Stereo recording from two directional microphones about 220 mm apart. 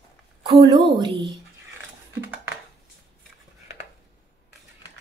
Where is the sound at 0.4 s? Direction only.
20° right (ahead or behind).